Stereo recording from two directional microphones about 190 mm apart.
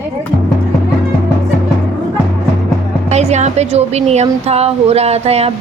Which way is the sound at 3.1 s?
35° right (ahead or behind).